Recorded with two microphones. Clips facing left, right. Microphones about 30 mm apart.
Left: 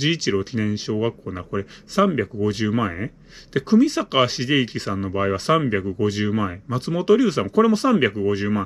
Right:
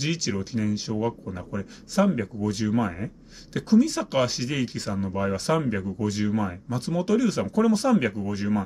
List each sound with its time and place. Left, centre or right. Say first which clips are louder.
0.0 s speech: left 7 dB; left